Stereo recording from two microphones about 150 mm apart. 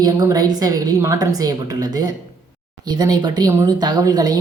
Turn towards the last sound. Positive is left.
turn(degrees=-25)  # may be behind; listen again after turning